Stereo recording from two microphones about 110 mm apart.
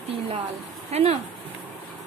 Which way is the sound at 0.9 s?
75° right (ahead or behind).